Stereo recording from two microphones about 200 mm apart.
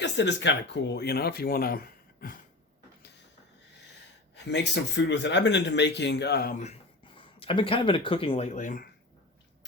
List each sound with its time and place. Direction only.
0.0 s speech: 60° left (ahead or behind)
4.4 s speech: 60° left (ahead or behind)
6.6 s speech: 30° left (ahead or behind)